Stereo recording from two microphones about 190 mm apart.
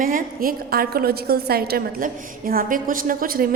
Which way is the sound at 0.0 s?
45° right (ahead or behind).